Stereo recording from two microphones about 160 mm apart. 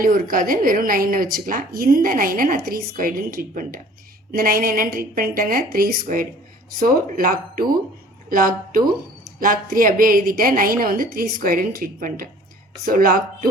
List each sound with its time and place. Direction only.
0.0 s a woman's voice: 60° right (ahead or behind)